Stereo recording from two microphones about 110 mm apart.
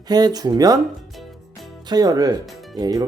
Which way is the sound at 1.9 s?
35° right (ahead or behind).